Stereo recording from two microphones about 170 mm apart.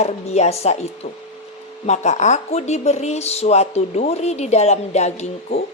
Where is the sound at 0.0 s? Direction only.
40° left (ahead or behind).